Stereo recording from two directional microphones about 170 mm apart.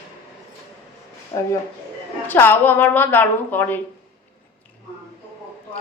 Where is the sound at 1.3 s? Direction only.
15° left (ahead or behind).